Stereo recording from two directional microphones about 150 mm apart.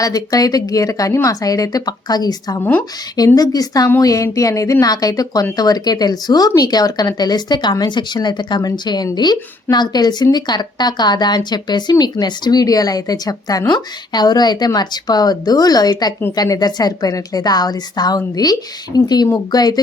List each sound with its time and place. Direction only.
0.0 s speech: 25° left (ahead or behind)